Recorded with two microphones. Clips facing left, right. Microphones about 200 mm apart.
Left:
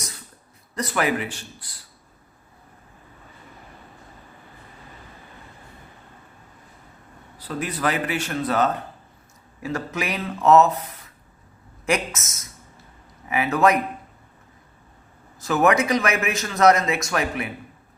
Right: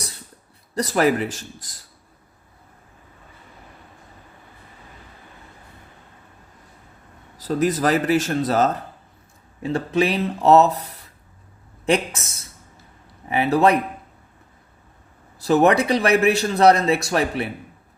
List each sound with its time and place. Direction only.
0.7 s a man's voice: 35° right (ahead or behind)
7.3 s a man's voice: 40° right (ahead or behind)
15.4 s a man's voice: 35° right (ahead or behind)